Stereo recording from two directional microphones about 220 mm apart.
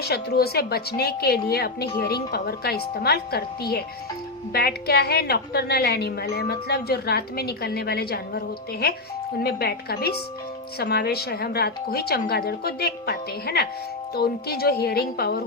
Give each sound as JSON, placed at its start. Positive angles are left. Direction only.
{"t": 0.0, "sound": "a woman's voice", "side_deg": 45}